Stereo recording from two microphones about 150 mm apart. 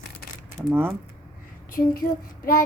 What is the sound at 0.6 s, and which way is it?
Speech, 25° right (ahead or behind).